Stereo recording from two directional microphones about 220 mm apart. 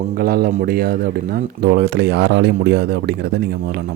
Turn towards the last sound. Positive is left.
turn(degrees=-50)  # may be behind; listen again after turning